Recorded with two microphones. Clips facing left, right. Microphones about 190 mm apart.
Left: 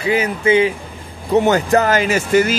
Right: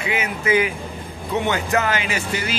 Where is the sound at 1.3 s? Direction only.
40° left (ahead or behind).